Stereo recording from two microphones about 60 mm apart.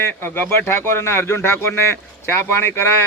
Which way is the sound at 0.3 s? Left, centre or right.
Left.